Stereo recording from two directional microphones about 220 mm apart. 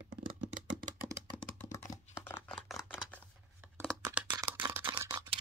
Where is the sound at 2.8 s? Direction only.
5° right (ahead or behind).